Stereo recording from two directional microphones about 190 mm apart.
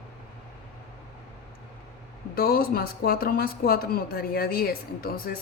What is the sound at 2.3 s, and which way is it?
Speech, 55° left (ahead or behind).